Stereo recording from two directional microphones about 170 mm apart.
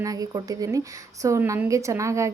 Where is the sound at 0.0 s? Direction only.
20° right (ahead or behind).